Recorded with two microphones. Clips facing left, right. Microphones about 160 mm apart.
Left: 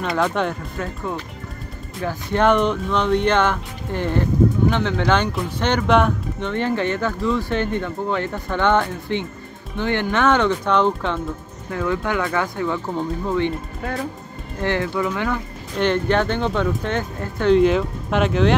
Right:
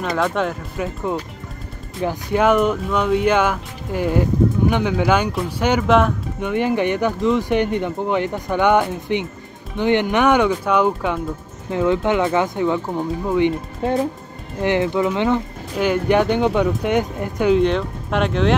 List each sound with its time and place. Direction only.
0.0 s speech: centre (ahead or behind)
1.1 s speech: 20° right (ahead or behind)
2.3 s speech: 5° right (ahead or behind)
6.5 s speech: 15° right (ahead or behind)
11.7 s speech: 20° right (ahead or behind)
15.7 s speech: 10° right (ahead or behind)
17.6 s speech: centre (ahead or behind)